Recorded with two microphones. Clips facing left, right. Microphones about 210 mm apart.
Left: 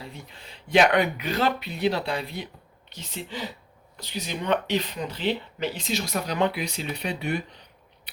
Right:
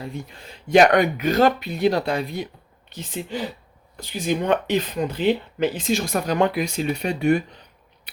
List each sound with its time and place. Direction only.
0.0 s speech: 45° right (ahead or behind)